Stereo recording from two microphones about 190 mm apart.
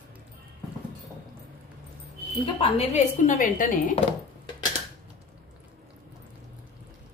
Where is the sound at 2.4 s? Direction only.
30° left (ahead or behind).